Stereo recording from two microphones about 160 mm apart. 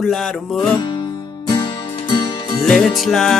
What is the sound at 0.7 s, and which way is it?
Music, 25° left (ahead or behind).